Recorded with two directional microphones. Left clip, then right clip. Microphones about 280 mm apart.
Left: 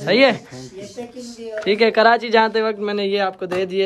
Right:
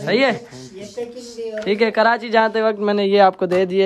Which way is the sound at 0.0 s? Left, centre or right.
Centre.